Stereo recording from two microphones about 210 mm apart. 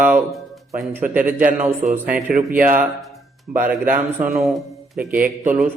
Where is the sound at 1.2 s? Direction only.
40° right (ahead or behind).